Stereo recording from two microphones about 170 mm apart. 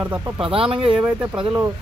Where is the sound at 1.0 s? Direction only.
15° right (ahead or behind).